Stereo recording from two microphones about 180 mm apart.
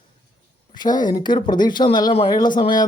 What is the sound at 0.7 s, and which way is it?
Speech, 25° left (ahead or behind).